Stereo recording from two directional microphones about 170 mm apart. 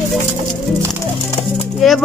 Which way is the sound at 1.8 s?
Centre (ahead or behind).